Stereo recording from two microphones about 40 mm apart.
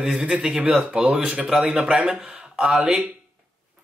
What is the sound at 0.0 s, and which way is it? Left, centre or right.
Speech, right.